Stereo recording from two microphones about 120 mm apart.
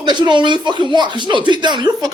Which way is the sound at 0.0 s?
40° right (ahead or behind).